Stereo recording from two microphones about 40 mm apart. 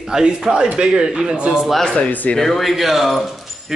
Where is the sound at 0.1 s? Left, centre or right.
Right.